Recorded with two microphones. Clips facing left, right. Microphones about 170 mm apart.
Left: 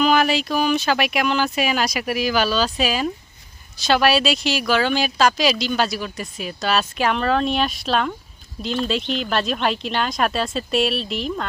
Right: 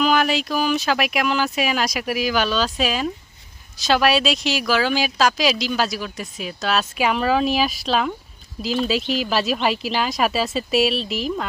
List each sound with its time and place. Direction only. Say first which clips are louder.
0.0 s speech: left 1 dB; centre (ahead or behind)